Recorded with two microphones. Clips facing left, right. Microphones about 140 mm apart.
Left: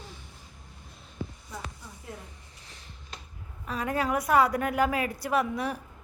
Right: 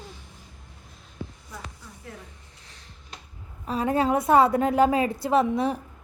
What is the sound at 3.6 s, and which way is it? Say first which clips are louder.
A woman's voice: right 6 dB; 30° right (ahead or behind).